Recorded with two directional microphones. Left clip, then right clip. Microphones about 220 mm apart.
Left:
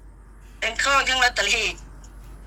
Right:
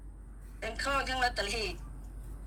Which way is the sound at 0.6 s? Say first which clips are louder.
Left 12 dB; 15° left (ahead or behind).